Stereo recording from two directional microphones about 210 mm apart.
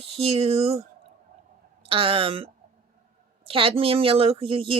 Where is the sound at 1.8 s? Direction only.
25° right (ahead or behind).